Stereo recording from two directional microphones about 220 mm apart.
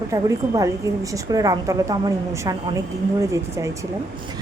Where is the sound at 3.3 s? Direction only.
15° right (ahead or behind).